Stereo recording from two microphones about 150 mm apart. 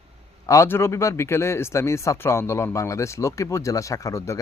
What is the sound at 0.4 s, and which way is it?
Speech, 20° left (ahead or behind).